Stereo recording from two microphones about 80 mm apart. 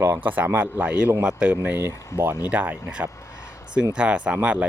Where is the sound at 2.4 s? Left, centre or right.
Centre.